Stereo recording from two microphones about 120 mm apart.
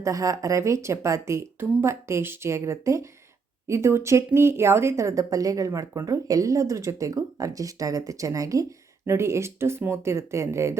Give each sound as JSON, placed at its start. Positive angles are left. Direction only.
{"t": 0.0, "sound": "a woman's voice", "side_deg": -25}